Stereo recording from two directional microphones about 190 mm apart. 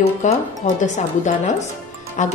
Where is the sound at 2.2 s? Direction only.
40° left (ahead or behind).